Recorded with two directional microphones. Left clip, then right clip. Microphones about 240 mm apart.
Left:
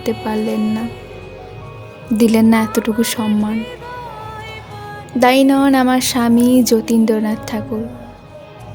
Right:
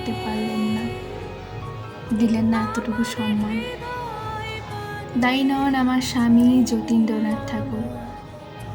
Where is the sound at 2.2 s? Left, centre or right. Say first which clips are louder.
Left 9 dB; left.